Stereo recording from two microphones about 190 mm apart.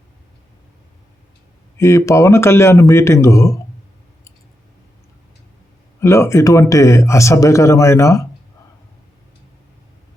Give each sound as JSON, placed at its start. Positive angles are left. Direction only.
{"t": 1.8, "sound": "speech", "side_deg": 15}
{"t": 6.0, "sound": "speech", "side_deg": 15}